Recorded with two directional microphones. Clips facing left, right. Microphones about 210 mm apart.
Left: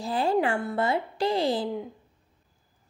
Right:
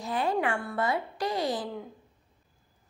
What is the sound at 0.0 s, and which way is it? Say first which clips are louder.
Speech: left 4 dB; 30° left (ahead or behind).